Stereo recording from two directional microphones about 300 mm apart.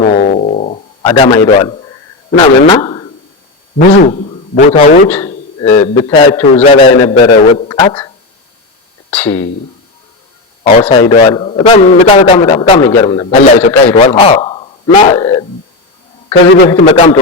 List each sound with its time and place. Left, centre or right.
0.0 s a sound: left
2.3 s a man's voice: centre
3.8 s a man's voice: left
5.0 s speech: centre
5.6 s a man's voice: left
10.6 s a man's voice: centre
13.4 s a man's voice: left
16.6 s a man's voice: centre